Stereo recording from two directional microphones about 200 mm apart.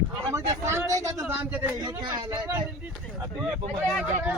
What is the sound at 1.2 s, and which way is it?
Speech, 10° right (ahead or behind).